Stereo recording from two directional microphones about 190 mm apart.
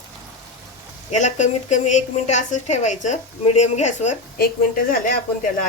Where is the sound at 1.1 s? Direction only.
40° left (ahead or behind).